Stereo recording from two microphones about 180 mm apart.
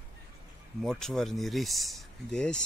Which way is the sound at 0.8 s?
5° left (ahead or behind).